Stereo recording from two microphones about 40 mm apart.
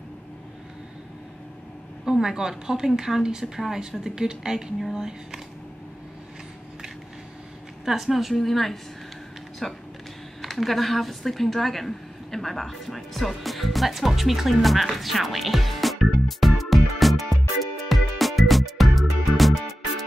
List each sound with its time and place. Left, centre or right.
2.1 s a woman's voice: centre
7.8 s a woman's voice: centre
10.4 s a sound: centre